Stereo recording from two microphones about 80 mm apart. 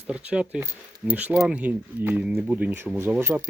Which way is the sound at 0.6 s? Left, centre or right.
Right.